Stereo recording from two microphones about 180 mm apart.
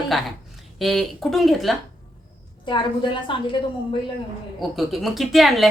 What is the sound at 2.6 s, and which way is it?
Speech, 25° left (ahead or behind).